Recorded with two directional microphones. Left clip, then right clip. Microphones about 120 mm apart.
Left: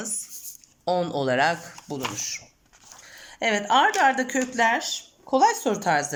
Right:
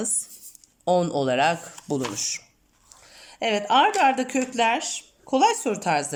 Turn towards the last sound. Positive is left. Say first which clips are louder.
# left 1 dB
turn(degrees=-10)  # may be behind; listen again after turning